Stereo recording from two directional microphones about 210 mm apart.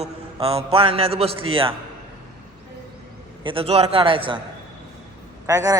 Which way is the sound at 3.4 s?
25° right (ahead or behind).